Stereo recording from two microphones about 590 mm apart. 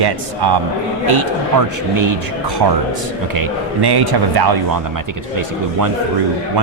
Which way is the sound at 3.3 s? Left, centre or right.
Right.